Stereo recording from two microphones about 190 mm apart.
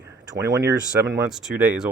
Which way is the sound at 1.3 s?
5° right (ahead or behind).